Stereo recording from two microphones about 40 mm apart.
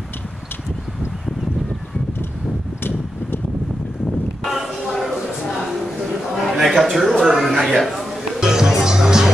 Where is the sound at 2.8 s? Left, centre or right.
Left.